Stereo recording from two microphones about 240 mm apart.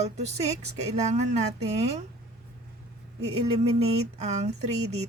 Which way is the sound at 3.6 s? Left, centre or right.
Right.